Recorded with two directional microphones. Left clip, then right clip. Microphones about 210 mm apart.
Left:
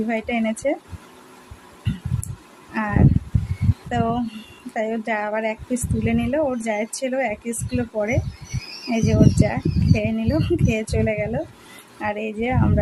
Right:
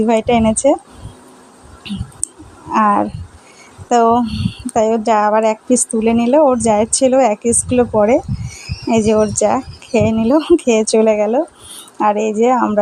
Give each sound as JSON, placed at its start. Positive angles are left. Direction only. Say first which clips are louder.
{"t": 0.1, "sound": "speech", "louder": "right 12 dB", "side_deg": -30}
{"t": 2.7, "sound": "a woman's voice", "louder": "right 11 dB", "side_deg": -30}